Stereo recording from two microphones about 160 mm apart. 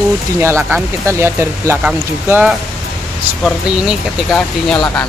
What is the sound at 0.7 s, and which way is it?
Speech, 10° right (ahead or behind).